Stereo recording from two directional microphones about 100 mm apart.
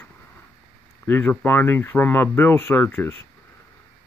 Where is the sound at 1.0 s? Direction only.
20° left (ahead or behind).